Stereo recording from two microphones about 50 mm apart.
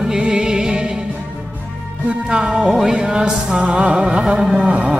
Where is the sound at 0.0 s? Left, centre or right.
Centre.